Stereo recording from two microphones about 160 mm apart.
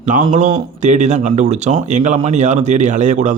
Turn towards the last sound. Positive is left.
turn(degrees=-50)  # may be behind; listen again after turning